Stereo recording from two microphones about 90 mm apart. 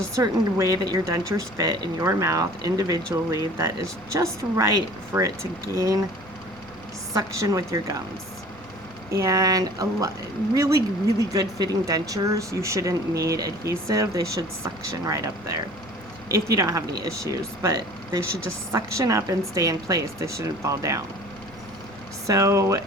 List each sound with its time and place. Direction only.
0.2 s speech: 40° right (ahead or behind)
7.1 s speech: 35° right (ahead or behind)
9.0 s speech: 35° right (ahead or behind)
22.3 s speech: 35° right (ahead or behind)